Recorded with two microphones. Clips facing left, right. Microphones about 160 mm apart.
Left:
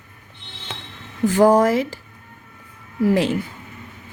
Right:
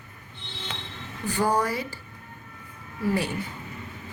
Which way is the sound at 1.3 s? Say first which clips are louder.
Left 11 dB; 90° left.